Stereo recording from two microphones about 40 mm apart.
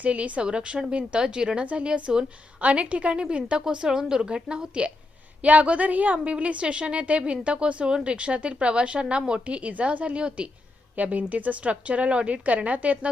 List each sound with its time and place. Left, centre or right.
0.0 s a woman's voice: right
10.2 s a woman's voice: right
10.9 s a woman's voice: right